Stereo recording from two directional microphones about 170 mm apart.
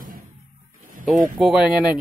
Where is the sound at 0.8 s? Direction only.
55° right (ahead or behind).